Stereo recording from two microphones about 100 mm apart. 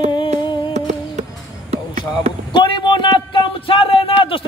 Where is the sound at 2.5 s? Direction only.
50° left (ahead or behind).